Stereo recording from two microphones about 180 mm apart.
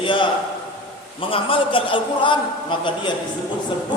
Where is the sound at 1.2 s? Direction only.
30° left (ahead or behind).